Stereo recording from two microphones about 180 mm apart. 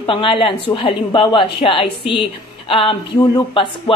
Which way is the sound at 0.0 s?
30° left (ahead or behind).